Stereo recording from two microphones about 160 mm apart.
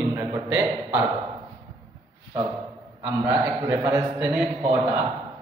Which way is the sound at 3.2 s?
20° right (ahead or behind).